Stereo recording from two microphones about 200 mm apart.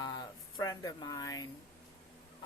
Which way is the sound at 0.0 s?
20° left (ahead or behind).